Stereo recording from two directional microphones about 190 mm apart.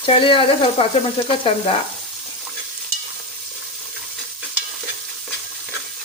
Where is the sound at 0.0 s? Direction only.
30° left (ahead or behind).